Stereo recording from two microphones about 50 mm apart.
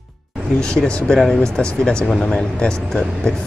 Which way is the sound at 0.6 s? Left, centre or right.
Centre.